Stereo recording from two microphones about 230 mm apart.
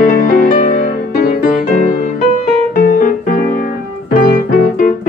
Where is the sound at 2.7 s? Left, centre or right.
Left.